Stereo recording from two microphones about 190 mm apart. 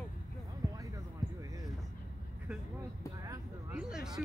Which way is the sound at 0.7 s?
15° right (ahead or behind).